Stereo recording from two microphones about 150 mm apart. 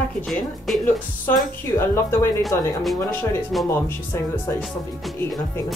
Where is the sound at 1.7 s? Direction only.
15° left (ahead or behind).